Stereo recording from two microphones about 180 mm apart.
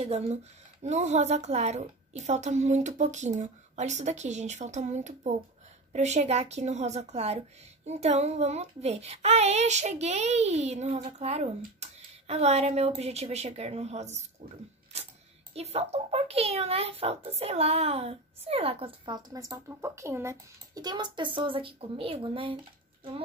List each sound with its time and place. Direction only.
0.0 s speech: 35° right (ahead or behind)
15.5 s speech: 35° right (ahead or behind)